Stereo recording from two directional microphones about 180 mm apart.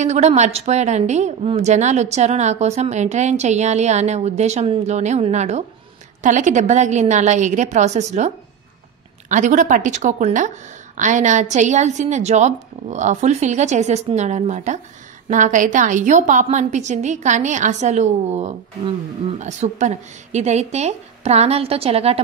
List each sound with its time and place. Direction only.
0.0 s a woman's voice: 40° right (ahead or behind)
9.3 s a woman's voice: 45° right (ahead or behind)